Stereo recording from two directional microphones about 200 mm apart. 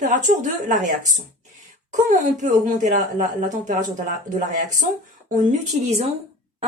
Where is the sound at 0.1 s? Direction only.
40° right (ahead or behind).